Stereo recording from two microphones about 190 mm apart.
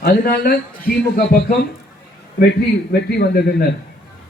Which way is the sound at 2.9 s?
55° left (ahead or behind).